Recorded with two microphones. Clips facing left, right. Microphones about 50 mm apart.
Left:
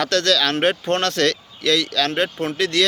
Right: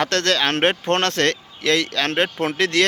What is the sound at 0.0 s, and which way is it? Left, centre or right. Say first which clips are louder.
Speech: left 1 dB; right.